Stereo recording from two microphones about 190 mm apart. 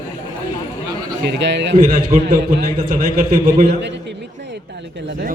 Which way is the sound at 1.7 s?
45° right (ahead or behind).